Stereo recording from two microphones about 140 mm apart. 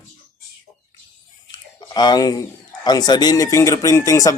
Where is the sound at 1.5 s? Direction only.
30° left (ahead or behind).